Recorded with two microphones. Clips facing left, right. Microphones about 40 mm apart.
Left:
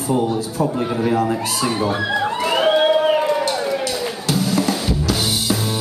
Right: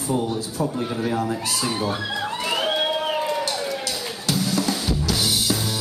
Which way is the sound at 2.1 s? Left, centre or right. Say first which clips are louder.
Left 7 dB; left.